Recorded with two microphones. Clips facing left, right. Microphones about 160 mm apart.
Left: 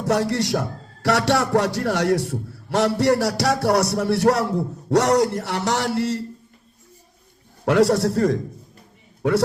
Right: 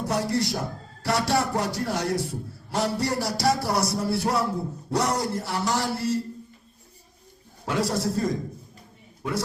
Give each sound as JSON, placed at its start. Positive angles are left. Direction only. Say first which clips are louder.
{"t": 0.0, "sound": "a man's voice", "louder": "left 4 dB", "side_deg": 75}
{"t": 7.6, "sound": "a man's voice", "louder": "left 9 dB", "side_deg": 75}